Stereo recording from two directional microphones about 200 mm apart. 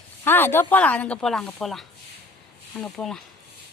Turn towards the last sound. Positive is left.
turn(degrees=0)  # may be behind; listen again after turning